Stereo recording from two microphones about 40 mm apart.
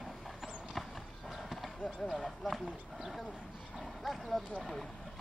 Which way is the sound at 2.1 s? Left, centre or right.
Centre.